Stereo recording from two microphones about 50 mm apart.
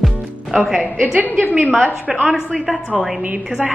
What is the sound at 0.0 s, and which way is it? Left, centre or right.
Music, centre.